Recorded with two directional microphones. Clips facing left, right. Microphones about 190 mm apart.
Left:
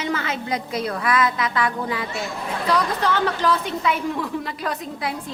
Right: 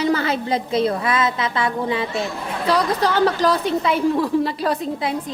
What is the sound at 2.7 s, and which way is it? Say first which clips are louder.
A woman's voice: right 3 dB; 35° right (ahead or behind).